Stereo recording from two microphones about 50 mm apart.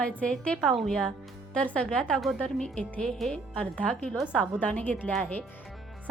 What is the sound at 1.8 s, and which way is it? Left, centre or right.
Speech, centre.